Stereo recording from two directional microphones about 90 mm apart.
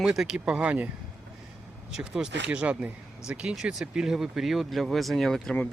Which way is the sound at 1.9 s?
5° right (ahead or behind).